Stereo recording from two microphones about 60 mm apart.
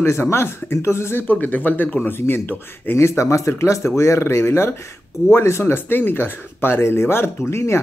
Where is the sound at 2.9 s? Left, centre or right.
Left.